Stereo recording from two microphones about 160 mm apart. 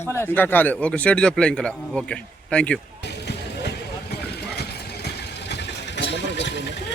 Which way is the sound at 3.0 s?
90° left.